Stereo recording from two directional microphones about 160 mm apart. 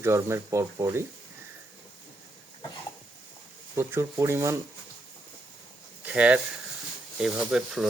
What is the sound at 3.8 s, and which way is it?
Speech, 15° right (ahead or behind).